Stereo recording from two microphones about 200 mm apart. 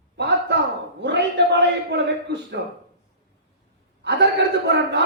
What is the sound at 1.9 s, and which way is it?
Speech, 60° right (ahead or behind).